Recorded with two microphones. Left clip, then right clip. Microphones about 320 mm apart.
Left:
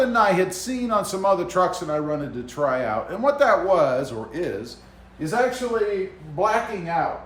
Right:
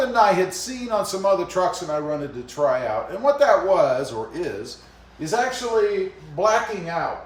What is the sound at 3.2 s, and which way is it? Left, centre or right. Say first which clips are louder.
Speech: right 2 dB; centre.